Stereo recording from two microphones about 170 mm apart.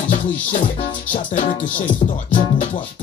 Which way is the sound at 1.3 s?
35° left (ahead or behind).